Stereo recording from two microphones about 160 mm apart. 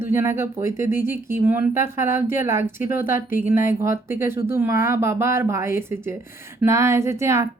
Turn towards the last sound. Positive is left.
turn(degrees=-15)  # may be behind; listen again after turning